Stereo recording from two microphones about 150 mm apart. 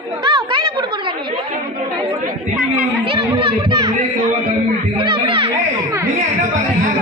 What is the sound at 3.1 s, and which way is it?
Children playing, 40° right (ahead or behind).